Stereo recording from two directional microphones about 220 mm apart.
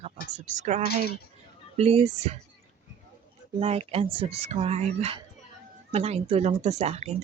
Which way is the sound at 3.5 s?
25° right (ahead or behind).